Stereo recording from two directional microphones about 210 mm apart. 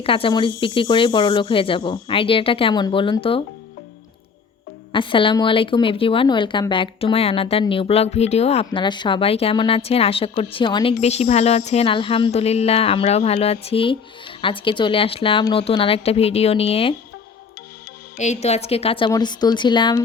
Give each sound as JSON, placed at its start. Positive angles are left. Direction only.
{"t": 0.0, "sound": "a woman's voice", "side_deg": 25}
{"t": 4.9, "sound": "a woman's voice", "side_deg": 25}
{"t": 18.2, "sound": "a woman's voice", "side_deg": 30}